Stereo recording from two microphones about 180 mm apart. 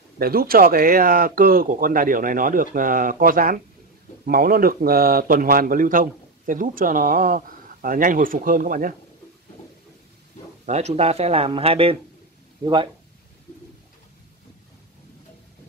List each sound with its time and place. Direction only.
0.2 s a man's voice: 55° right (ahead or behind)
10.6 s speech: 40° right (ahead or behind)